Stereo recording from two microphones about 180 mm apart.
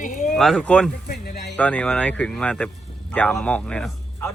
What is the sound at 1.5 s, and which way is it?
A man's voice, 10° left (ahead or behind).